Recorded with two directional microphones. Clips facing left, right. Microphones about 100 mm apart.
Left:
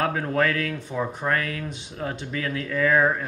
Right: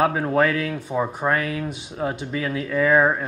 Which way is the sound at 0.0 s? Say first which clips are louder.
Right 4 dB; 20° right (ahead or behind).